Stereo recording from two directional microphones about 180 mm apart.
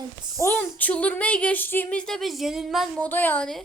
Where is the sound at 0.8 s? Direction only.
10° left (ahead or behind).